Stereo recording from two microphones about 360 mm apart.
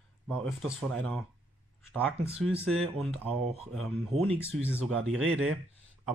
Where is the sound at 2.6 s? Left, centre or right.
Centre.